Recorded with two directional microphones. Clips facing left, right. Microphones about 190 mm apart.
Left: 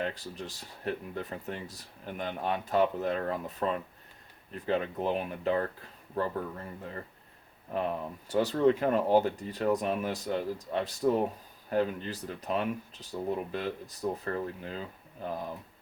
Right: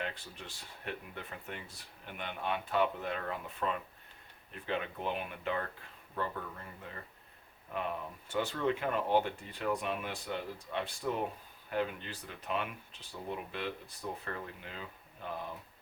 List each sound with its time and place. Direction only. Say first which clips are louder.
0.0 s speech: left 7 dB; 40° left (ahead or behind)
7.7 s speech: left 6 dB; 40° left (ahead or behind)